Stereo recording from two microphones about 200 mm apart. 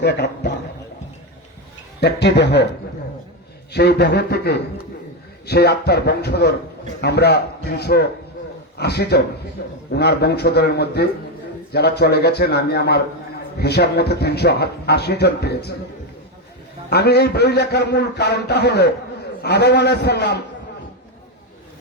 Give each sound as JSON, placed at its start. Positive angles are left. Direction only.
{"t": 0.0, "sound": "a man's voice", "side_deg": 60}
{"t": 2.0, "sound": "a man's voice", "side_deg": 60}
{"t": 3.7, "sound": "a man's voice", "side_deg": 55}
{"t": 16.9, "sound": "a man's voice", "side_deg": 55}